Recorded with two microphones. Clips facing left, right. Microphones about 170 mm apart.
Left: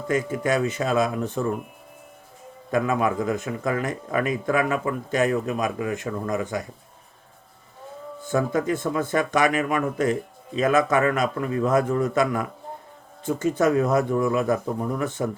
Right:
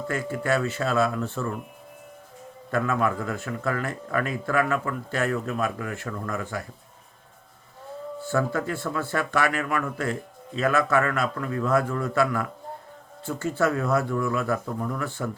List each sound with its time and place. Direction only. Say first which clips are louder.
0.1 s speech: left 4 dB; 20° left (ahead or behind)
2.6 s speech: left 2 dB; 15° left (ahead or behind)
8.2 s speech: left 3 dB; 15° left (ahead or behind)